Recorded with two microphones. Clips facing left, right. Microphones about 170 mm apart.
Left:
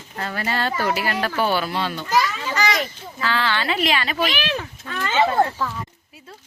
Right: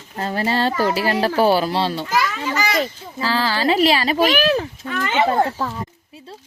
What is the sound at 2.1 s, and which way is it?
Children playing, 10° right (ahead or behind).